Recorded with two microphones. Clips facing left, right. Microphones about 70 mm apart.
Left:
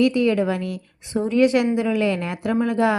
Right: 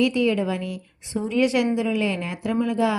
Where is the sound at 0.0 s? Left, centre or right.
Left.